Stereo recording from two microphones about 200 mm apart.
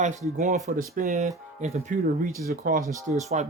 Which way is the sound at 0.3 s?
35° right (ahead or behind).